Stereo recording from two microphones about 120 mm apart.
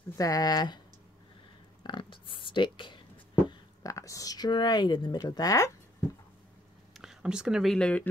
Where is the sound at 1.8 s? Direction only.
40° left (ahead or behind).